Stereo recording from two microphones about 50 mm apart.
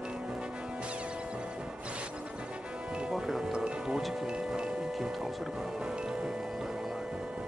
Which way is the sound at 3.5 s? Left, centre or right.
Centre.